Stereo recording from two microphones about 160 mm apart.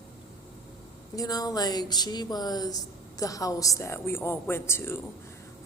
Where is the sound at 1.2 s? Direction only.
25° left (ahead or behind).